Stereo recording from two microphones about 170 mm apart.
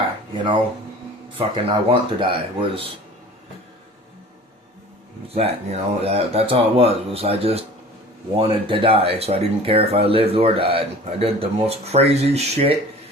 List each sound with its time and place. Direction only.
1.4 s speech: 30° right (ahead or behind)
5.3 s speech: 35° right (ahead or behind)